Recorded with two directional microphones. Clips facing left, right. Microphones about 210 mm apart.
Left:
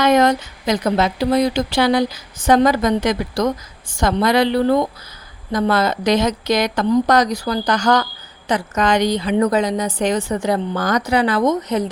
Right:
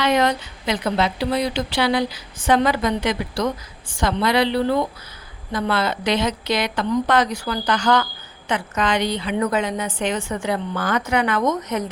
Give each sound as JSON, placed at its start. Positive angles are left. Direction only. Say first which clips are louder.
{"t": 0.0, "sound": "a woman's voice", "louder": "left 5 dB", "side_deg": 45}